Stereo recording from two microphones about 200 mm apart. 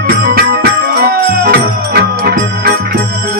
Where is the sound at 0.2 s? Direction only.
50° right (ahead or behind).